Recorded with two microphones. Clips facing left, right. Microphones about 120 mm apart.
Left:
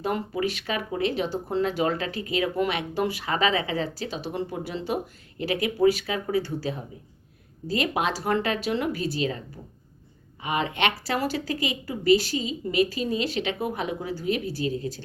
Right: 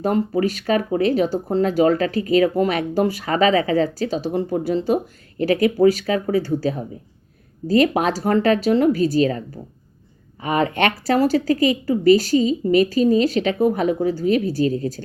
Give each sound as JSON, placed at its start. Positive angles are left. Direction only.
{"t": 0.0, "sound": "speech", "side_deg": -40}
{"t": 10.4, "sound": "speech", "side_deg": -45}